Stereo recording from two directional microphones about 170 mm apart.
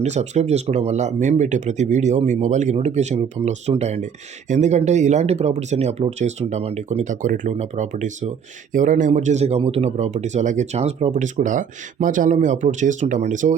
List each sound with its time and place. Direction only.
0.0 s speech: 40° right (ahead or behind)